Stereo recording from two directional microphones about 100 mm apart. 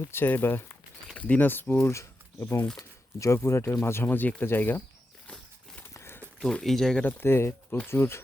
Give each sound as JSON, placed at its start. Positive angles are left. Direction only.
{"t": 0.1, "sound": "speech", "side_deg": 20}
{"t": 5.8, "sound": "a sound", "side_deg": 25}
{"t": 6.4, "sound": "speech", "side_deg": 5}
{"t": 7.0, "sound": "speech", "side_deg": 20}